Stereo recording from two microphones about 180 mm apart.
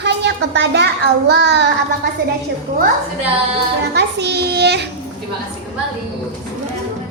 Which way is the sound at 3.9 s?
70° right (ahead or behind).